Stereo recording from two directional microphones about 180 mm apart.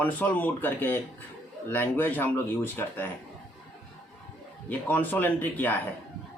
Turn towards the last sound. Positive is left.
turn(degrees=10)  # may be behind; listen again after turning